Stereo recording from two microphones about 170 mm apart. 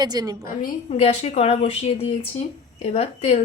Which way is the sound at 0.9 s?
40° left (ahead or behind).